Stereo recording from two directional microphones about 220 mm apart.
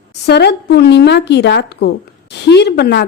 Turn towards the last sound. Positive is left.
turn(degrees=50)  # may be behind; listen again after turning